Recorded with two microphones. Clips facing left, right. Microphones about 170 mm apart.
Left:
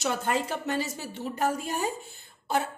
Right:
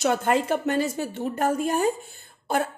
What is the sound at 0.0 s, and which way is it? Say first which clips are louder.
A woman's voice: right 6 dB; 55° right (ahead or behind).